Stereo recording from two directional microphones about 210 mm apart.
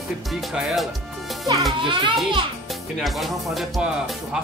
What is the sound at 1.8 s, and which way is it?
Speech, 25° right (ahead or behind).